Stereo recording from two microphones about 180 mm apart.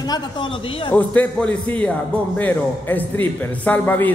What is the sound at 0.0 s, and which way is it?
Speech, 25° left (ahead or behind).